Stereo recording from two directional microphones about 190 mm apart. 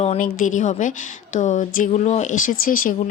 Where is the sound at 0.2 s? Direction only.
45° left (ahead or behind).